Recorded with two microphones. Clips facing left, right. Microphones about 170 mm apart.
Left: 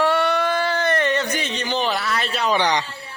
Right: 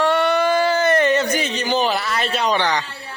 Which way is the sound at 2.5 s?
20° left (ahead or behind).